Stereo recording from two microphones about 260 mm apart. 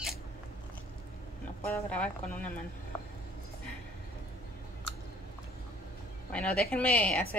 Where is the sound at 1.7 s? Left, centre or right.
Centre.